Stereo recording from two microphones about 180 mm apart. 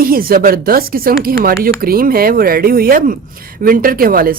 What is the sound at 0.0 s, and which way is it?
A woman's voice, 55° right (ahead or behind).